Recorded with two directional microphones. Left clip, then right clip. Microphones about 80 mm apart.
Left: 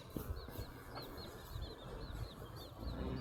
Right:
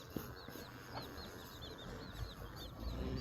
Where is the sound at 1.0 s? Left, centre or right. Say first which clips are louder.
Right 1 dB; centre.